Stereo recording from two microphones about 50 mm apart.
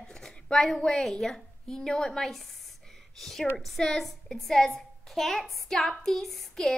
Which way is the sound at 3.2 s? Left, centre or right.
Centre.